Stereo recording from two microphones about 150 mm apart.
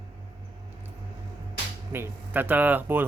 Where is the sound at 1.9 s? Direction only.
15° right (ahead or behind).